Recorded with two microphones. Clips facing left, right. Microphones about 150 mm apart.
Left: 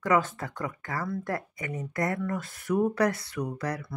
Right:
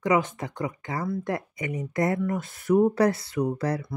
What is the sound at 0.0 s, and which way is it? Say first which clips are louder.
Speech: right 2 dB; 15° right (ahead or behind).